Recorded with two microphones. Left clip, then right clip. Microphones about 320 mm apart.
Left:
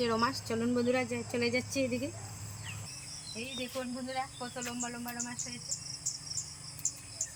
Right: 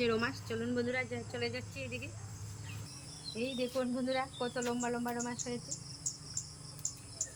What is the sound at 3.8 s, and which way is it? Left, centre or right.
Speech, centre.